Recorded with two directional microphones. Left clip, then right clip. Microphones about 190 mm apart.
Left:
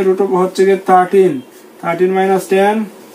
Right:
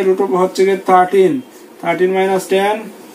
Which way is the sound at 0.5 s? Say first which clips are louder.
Left 3 dB; 10° left (ahead or behind).